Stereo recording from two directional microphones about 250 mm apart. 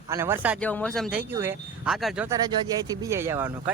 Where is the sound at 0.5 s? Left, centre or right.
Centre.